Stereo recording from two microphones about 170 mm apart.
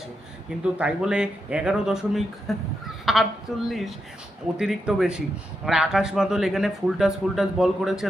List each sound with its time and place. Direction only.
0.6 s speech: 5° right (ahead or behind)